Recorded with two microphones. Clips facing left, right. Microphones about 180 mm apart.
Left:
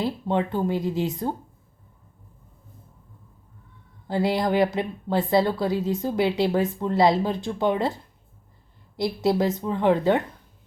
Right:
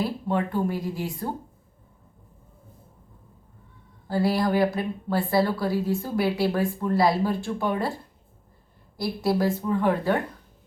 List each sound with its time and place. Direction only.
0.0 s a woman's voice: 20° left (ahead or behind)
4.1 s a woman's voice: 20° left (ahead or behind)
9.0 s a woman's voice: 20° left (ahead or behind)